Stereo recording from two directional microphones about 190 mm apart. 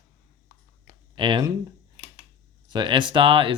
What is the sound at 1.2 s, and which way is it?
Speech, 25° right (ahead or behind).